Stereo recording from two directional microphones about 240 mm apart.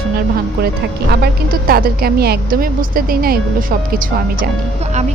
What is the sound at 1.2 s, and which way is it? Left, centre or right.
A woman's voice, right.